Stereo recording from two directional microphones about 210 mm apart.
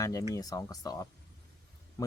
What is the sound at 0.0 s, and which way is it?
Speech, 15° left (ahead or behind).